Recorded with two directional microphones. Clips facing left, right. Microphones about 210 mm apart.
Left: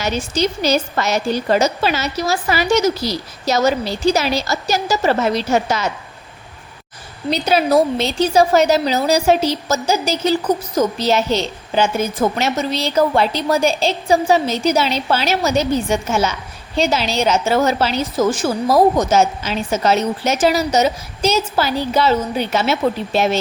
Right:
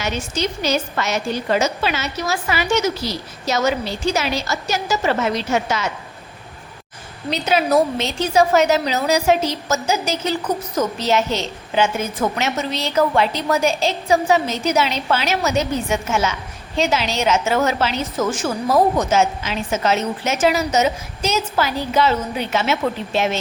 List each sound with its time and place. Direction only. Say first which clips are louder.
0.0 s a woman's voice: left 4 dB; 35° left (ahead or behind)
7.3 s a woman's voice: left 3 dB; 35° left (ahead or behind)